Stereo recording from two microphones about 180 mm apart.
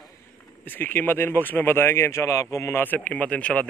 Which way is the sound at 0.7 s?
10° left (ahead or behind).